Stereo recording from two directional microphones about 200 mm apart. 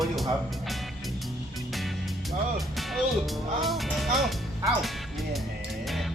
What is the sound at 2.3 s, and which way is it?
Speech, centre (ahead or behind).